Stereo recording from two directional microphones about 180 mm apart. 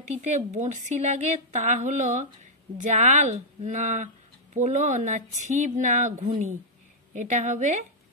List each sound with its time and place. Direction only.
0.1 s a woman's voice: 40° right (ahead or behind)